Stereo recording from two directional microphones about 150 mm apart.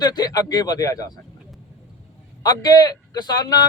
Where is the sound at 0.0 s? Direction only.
30° left (ahead or behind).